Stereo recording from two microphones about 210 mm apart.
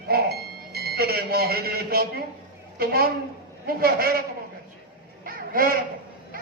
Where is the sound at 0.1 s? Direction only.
50° right (ahead or behind).